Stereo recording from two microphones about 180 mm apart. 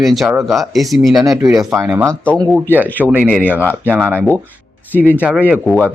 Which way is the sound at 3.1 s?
5° right (ahead or behind).